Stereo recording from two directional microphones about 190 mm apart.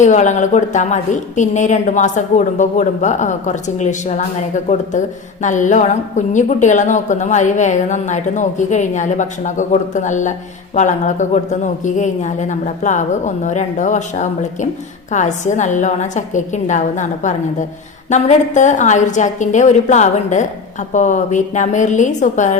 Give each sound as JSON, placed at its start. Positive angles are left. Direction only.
{"t": 0.0, "sound": "speech", "side_deg": 40}